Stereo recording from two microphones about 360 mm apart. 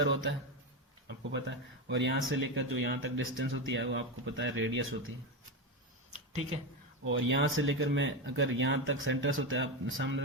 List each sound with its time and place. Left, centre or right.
0.0 s speech: right
7.0 s speech: right